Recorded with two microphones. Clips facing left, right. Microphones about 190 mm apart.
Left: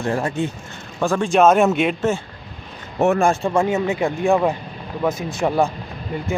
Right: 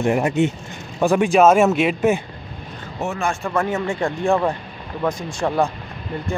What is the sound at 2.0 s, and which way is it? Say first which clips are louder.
Speech: right 3 dB; 15° right (ahead or behind).